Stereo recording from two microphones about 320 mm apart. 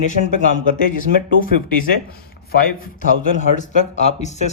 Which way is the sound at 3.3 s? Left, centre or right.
Left.